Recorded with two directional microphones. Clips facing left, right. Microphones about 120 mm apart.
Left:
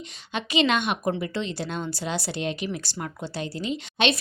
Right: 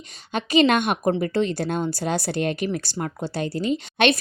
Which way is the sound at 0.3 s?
45° right (ahead or behind).